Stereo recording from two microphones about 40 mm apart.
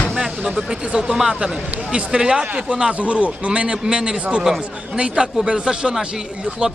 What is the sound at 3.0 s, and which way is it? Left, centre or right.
A man's voice, right.